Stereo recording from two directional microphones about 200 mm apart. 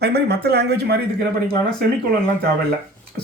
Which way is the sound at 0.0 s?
55° right (ahead or behind).